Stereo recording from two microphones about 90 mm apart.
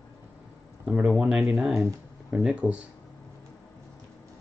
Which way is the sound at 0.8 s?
10° right (ahead or behind).